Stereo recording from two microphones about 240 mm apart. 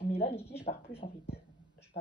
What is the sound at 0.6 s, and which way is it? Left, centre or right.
Speech, left.